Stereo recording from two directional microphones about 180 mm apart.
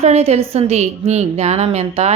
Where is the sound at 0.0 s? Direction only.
35° right (ahead or behind).